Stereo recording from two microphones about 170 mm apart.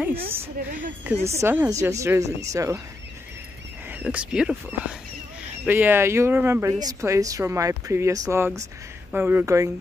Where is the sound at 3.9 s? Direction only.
10° right (ahead or behind).